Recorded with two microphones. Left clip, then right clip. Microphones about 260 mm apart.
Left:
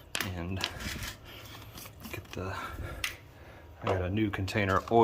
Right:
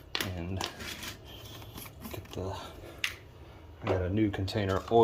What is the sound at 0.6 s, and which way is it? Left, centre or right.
Dishes, centre.